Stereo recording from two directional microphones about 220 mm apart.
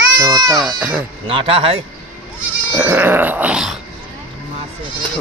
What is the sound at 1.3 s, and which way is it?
Speech, 25° right (ahead or behind).